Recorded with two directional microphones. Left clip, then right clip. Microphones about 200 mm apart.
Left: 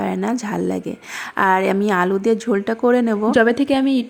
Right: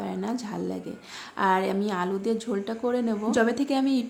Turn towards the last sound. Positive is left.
turn(degrees=25)  # may be behind; listen again after turning